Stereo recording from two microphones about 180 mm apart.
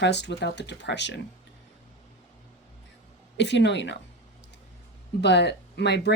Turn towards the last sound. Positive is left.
turn(degrees=70)  # may be behind; listen again after turning